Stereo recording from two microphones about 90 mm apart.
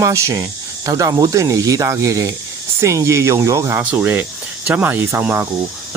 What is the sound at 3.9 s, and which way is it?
Speech, 20° right (ahead or behind).